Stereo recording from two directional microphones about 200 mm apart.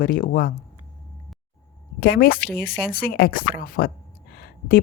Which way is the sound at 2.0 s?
50° left (ahead or behind).